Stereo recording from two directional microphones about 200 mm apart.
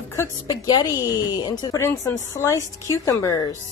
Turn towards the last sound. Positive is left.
turn(degrees=15)  # may be behind; listen again after turning